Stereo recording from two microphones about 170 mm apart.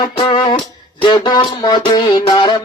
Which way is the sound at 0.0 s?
30° left (ahead or behind).